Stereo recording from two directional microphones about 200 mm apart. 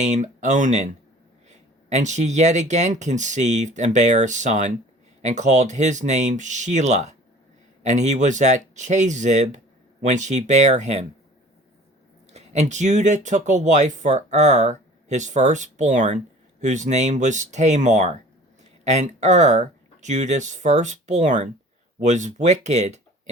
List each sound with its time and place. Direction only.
0.0 s speech: 35° right (ahead or behind)
12.3 s speech: 35° right (ahead or behind)